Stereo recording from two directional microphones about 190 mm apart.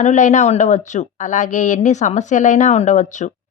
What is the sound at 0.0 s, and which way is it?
A woman's voice, 40° left (ahead or behind).